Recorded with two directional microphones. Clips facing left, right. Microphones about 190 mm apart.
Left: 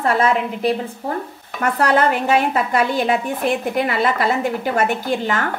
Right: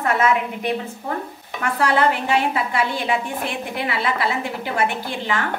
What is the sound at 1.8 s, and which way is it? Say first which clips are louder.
A woman's voice: left 2 dB; 45° left (ahead or behind).